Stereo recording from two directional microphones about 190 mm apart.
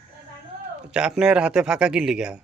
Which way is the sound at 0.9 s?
5° right (ahead or behind).